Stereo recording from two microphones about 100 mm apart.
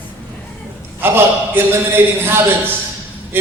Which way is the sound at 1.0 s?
20° right (ahead or behind).